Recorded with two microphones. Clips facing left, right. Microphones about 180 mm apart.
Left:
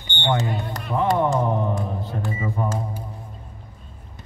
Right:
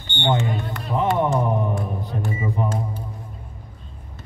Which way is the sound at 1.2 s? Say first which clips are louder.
Even; 15° right (ahead or behind).